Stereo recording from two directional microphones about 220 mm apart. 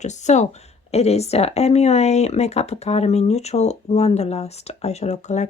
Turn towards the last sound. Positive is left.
turn(degrees=30)  # may be behind; listen again after turning